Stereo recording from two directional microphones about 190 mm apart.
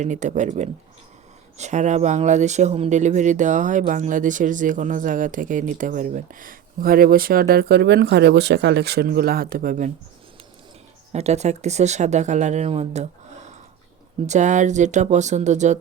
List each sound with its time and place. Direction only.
0.0 s speech: 40° right (ahead or behind)
11.1 s speech: 35° right (ahead or behind)